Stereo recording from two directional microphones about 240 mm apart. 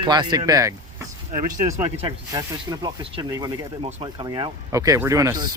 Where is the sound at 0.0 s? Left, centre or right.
Centre.